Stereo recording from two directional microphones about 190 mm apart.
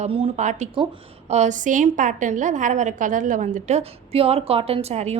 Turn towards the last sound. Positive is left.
turn(degrees=-35)  # may be behind; listen again after turning